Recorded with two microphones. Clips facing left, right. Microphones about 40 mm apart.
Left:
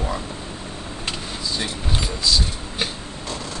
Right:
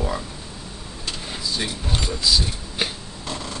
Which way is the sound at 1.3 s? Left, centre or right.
Centre.